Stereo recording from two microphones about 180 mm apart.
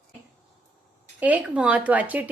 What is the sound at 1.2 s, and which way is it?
Speech, 10° right (ahead or behind).